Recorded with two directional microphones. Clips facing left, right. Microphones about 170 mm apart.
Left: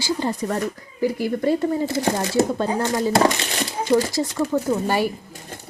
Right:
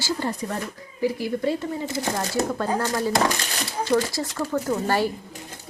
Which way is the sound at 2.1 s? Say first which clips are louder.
Left 5 dB; 25° left (ahead or behind).